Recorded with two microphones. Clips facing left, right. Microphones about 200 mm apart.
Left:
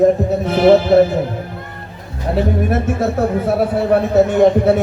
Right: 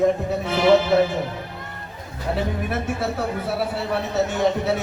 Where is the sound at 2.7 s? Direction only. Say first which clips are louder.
Left 8 dB; 40° left (ahead or behind).